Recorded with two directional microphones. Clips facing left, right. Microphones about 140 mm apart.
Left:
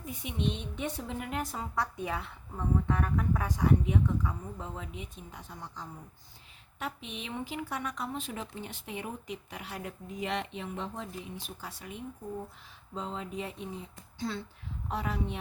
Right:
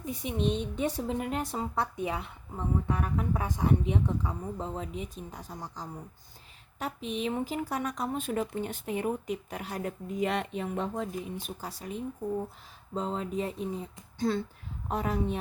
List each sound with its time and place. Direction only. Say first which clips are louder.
0.0 s a woman's voice: right 4 dB; 35° right (ahead or behind)